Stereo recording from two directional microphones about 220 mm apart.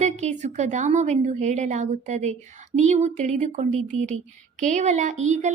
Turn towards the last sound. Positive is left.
turn(degrees=-30)  # may be behind; listen again after turning